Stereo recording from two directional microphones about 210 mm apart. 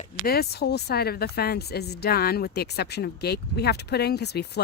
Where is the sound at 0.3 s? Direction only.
50° left (ahead or behind).